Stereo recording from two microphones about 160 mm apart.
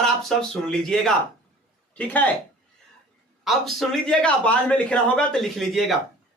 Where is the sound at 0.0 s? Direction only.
Centre (ahead or behind).